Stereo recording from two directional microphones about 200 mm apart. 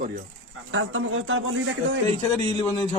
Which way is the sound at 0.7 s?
80° right.